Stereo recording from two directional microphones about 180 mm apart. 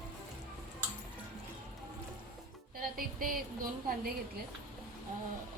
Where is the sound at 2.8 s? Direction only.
50° right (ahead or behind).